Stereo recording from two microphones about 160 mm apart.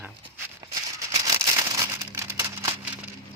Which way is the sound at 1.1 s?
25° right (ahead or behind).